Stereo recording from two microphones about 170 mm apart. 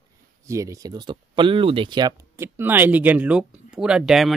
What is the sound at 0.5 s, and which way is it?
Speech, 20° right (ahead or behind).